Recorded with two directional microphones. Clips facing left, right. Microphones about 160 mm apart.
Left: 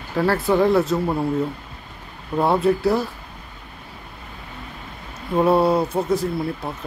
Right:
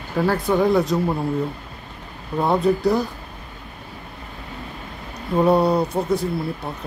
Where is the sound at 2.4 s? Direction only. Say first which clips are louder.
Even; 5° left (ahead or behind).